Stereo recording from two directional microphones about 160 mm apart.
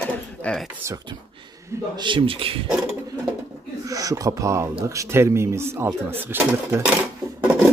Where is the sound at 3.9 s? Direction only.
20° right (ahead or behind).